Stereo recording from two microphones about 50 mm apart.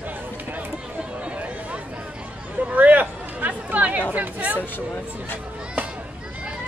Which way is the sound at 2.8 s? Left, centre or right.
Right.